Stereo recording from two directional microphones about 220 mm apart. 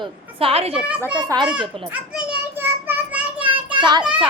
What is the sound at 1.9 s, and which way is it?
Children playing, 5° right (ahead or behind).